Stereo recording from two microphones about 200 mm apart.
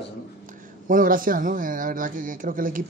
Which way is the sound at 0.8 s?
45° right (ahead or behind).